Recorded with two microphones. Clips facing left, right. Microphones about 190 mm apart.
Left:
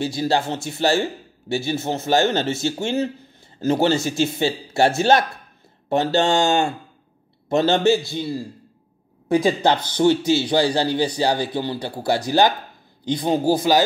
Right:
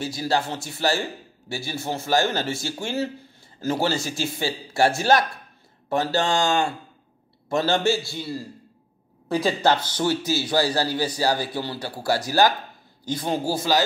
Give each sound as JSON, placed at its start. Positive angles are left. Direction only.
{"t": 0.0, "sound": "a man's voice", "side_deg": 25}
{"t": 10.2, "sound": "a man's voice", "side_deg": -5}
{"t": 10.5, "sound": "speech", "side_deg": 20}